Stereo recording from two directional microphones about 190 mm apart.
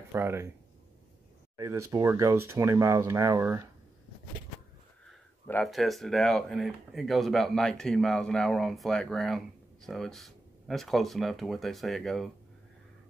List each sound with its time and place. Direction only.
0.1 s speech: 10° right (ahead or behind)
1.6 s speech: 15° right (ahead or behind)
5.0 s speech: centre (ahead or behind)